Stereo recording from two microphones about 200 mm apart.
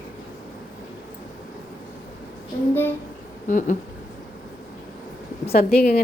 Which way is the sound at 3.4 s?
40° left (ahead or behind).